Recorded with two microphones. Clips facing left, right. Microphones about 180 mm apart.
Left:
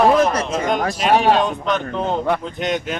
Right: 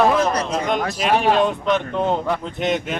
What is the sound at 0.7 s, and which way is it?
Speech, 45° left (ahead or behind).